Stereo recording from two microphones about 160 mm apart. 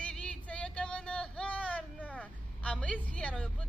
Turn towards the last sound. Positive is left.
turn(degrees=5)  # may be behind; listen again after turning